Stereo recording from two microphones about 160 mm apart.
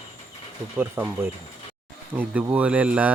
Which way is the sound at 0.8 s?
15° right (ahead or behind).